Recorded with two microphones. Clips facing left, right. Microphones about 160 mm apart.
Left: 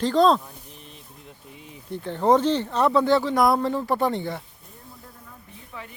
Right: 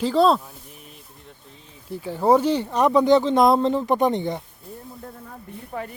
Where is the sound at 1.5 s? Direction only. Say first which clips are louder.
Left 5 dB; 15° left (ahead or behind).